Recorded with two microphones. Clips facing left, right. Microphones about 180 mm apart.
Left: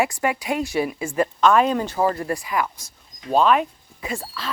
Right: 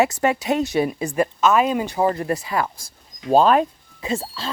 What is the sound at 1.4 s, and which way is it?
Speech, 5° right (ahead or behind).